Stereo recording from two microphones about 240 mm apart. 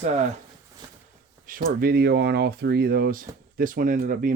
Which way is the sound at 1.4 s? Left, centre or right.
Right.